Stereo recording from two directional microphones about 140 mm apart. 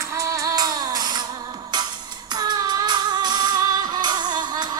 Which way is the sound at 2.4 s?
30° right (ahead or behind).